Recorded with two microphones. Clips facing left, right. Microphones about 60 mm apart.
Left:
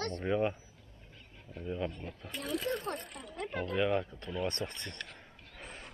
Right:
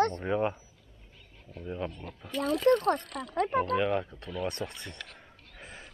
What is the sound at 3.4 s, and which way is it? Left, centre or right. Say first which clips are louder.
Speech: right 9 dB; right.